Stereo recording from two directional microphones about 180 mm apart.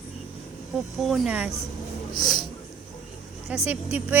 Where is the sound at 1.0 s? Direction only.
Centre (ahead or behind).